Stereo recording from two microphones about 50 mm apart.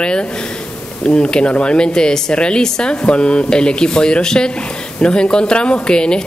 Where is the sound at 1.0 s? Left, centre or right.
Centre.